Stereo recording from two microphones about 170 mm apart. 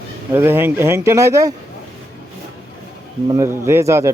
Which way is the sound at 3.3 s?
15° right (ahead or behind).